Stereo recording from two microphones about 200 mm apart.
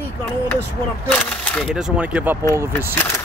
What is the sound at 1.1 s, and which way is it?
Speech, 5° left (ahead or behind).